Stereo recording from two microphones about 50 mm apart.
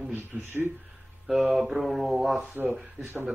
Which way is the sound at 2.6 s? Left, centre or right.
Right.